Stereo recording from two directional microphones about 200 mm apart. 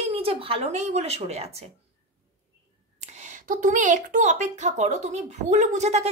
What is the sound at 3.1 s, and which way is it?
A woman's voice, 40° right (ahead or behind).